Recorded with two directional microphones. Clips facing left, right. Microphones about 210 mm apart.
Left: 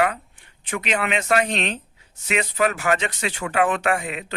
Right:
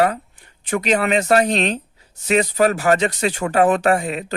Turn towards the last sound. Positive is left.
turn(degrees=-40)  # may be behind; listen again after turning